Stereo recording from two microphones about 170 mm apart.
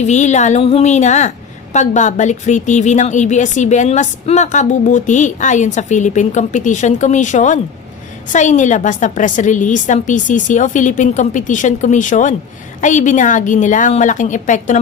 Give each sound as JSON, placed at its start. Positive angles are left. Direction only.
{"t": 0.0, "sound": "a woman's voice", "side_deg": 45}